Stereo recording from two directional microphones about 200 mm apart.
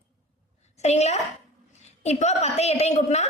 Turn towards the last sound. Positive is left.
turn(degrees=35)  # may be behind; listen again after turning